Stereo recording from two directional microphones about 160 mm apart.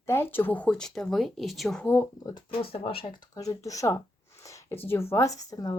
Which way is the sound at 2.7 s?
35° left (ahead or behind).